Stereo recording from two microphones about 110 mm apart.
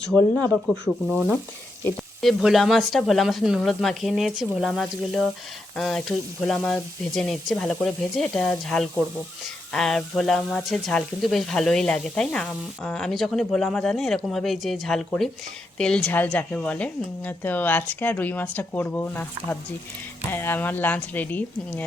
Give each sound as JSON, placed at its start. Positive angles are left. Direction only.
{"t": 0.2, "sound": "speech", "side_deg": 15}
{"t": 0.5, "sound": "speech", "side_deg": 0}
{"t": 2.2, "sound": "speech", "side_deg": 0}